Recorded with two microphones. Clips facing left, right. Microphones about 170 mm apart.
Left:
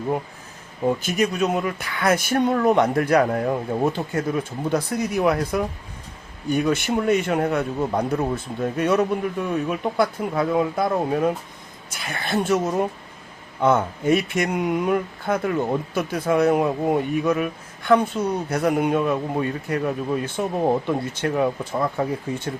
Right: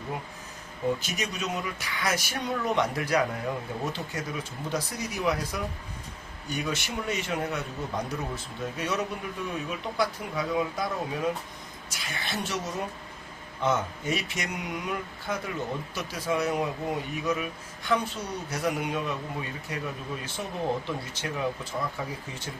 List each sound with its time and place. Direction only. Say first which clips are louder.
0.9 s speech: left 8 dB; 55° left (ahead or behind)